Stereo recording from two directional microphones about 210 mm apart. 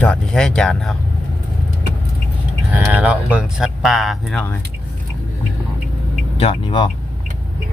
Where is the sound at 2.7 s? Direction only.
5° right (ahead or behind).